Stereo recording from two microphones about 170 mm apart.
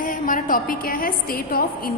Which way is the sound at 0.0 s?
50° left (ahead or behind).